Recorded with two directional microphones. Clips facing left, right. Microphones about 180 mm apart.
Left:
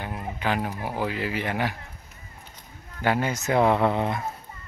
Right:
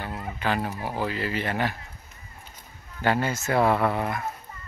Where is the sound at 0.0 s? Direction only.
15° left (ahead or behind).